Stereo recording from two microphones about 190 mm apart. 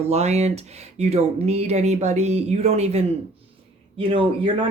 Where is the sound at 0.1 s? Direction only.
35° right (ahead or behind).